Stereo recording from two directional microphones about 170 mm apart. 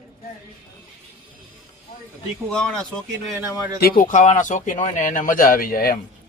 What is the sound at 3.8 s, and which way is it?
Speech, 55° left (ahead or behind).